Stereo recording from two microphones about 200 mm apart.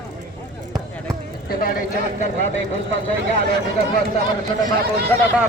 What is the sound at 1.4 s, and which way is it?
Speech, 45° left (ahead or behind).